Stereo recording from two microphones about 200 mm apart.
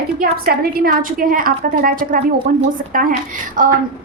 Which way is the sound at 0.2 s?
45° right (ahead or behind).